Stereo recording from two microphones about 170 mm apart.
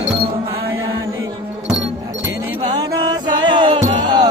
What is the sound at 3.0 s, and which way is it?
Music, 25° right (ahead or behind).